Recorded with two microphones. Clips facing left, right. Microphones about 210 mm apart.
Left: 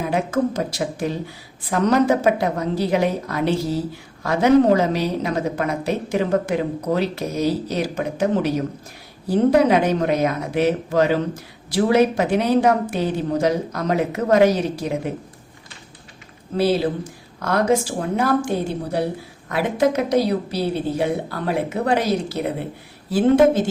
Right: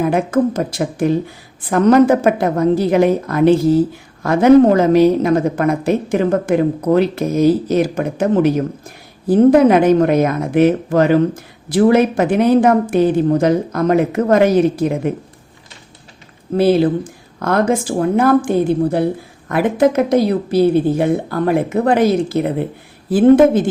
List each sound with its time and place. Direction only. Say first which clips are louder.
0.0 s a woman's voice: right 6 dB; 55° right (ahead or behind)
16.6 s a woman's voice: right 6 dB; 55° right (ahead or behind)